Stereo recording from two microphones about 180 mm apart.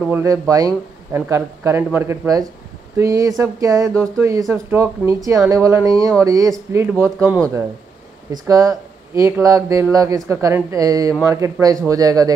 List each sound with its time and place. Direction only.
0.0 s speech: 15° right (ahead or behind)